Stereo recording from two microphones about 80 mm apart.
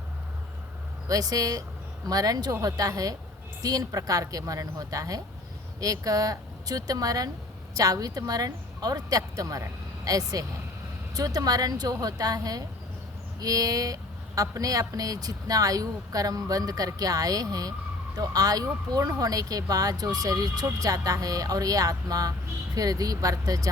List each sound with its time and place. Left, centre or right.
1.0 s speech: right